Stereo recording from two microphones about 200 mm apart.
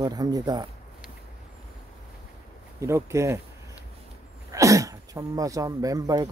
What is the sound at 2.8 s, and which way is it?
Speech, 15° right (ahead or behind).